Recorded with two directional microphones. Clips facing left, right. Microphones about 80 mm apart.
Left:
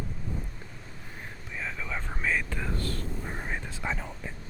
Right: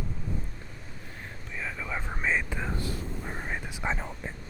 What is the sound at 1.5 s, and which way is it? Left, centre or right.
Whispering, centre.